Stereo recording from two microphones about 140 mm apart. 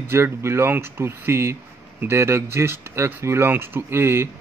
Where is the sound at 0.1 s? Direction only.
20° right (ahead or behind).